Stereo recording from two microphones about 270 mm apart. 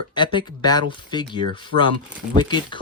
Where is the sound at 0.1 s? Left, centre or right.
Centre.